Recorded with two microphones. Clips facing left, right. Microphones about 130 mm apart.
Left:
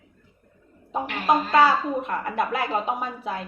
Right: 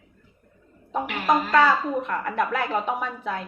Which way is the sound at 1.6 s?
10° left (ahead or behind).